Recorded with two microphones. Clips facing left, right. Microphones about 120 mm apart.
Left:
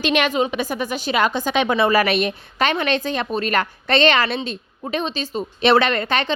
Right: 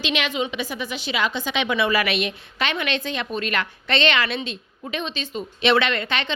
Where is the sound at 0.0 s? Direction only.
50° left (ahead or behind).